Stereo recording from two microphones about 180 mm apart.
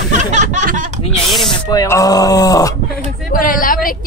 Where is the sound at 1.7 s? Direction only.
20° left (ahead or behind).